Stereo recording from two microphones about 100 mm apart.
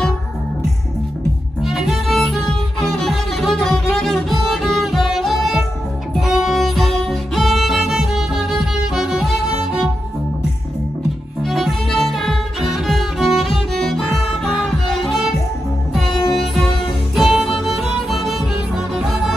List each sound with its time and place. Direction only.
1.6 s music: 5° right (ahead or behind)
11.4 s music: centre (ahead or behind)